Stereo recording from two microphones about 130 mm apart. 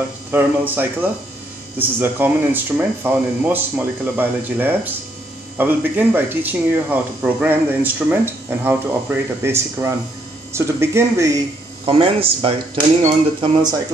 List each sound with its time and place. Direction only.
0.3 s speech: 15° right (ahead or behind)
11.8 s speech: 45° right (ahead or behind)
13.4 s speech: 35° right (ahead or behind)